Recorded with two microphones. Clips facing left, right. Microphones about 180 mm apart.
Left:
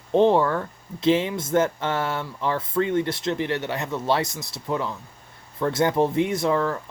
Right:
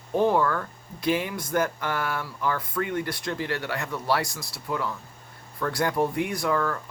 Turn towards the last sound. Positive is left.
turn(degrees=25)  # may be behind; listen again after turning